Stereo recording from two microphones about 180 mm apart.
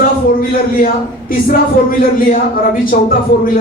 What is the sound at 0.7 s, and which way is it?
A man's voice, 55° left (ahead or behind).